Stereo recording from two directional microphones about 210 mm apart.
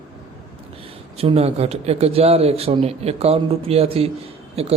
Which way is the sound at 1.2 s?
30° right (ahead or behind).